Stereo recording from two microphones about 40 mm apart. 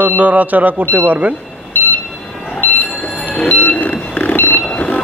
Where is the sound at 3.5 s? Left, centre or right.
Left.